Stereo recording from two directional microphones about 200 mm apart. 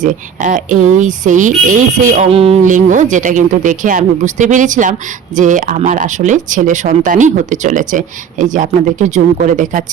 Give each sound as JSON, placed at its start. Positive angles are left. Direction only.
{"t": 0.0, "sound": "speech", "side_deg": -40}